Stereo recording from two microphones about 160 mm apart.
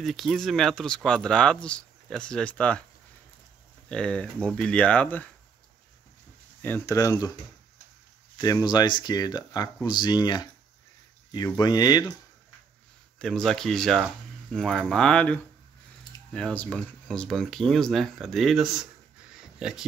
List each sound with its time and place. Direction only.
0.0 s speech: centre (ahead or behind)
3.9 s speech: 5° left (ahead or behind)
6.6 s speech: 15° left (ahead or behind)
8.4 s speech: 25° left (ahead or behind)
13.2 s speech: centre (ahead or behind)